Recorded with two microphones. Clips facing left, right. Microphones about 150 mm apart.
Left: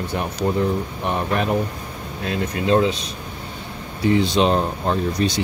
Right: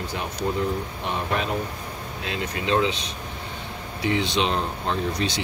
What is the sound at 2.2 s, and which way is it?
Speech, 45° left (ahead or behind).